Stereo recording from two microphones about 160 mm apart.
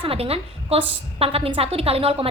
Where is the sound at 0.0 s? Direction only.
35° right (ahead or behind).